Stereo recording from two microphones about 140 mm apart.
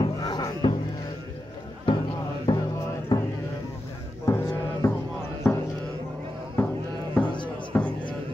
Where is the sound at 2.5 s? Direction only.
30° left (ahead or behind).